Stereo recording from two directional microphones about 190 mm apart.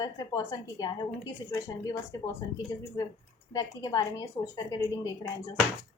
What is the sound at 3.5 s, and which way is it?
A woman's voice, 20° left (ahead or behind).